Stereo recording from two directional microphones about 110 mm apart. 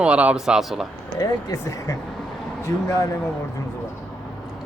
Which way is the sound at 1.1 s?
30° left (ahead or behind).